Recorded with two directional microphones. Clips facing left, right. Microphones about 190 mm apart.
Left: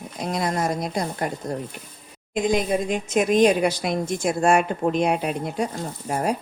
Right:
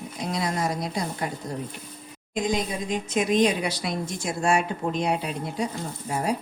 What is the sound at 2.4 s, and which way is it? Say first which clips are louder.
A woman's voice: left 6 dB; 55° left (ahead or behind).